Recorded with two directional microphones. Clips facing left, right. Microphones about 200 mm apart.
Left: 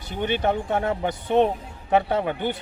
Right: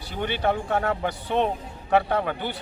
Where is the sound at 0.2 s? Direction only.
20° left (ahead or behind).